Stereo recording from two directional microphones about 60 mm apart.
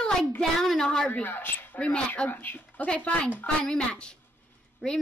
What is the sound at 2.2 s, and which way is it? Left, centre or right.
A woman's voice, left.